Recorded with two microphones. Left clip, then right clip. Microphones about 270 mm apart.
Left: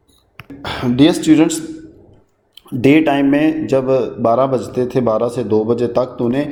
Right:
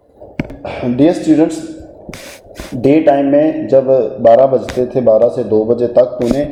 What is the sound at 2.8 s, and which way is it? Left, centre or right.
Speech, left.